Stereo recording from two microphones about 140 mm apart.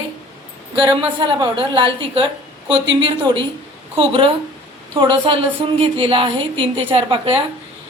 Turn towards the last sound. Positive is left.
turn(degrees=-40)  # may be behind; listen again after turning